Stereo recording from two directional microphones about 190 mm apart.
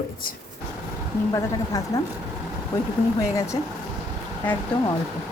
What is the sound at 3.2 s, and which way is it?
Speech, 15° left (ahead or behind).